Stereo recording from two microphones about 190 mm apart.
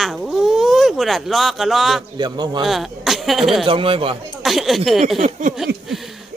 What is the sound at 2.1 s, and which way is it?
Speech, 20° right (ahead or behind).